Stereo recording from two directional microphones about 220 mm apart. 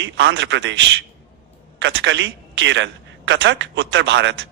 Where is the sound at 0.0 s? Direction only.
55° right (ahead or behind).